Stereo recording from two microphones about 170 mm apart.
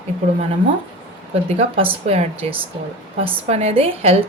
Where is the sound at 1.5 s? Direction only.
35° right (ahead or behind).